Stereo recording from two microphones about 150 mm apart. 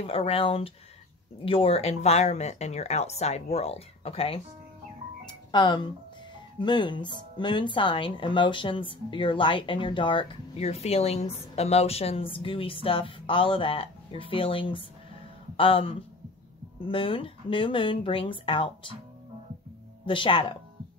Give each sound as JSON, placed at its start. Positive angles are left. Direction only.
{"t": 0.0, "sound": "speech", "side_deg": 40}
{"t": 5.2, "sound": "music", "side_deg": 30}
{"t": 6.6, "sound": "speech", "side_deg": 30}
{"t": 20.1, "sound": "speech", "side_deg": 35}